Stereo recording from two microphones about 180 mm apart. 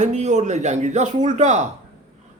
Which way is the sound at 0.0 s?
40° right (ahead or behind).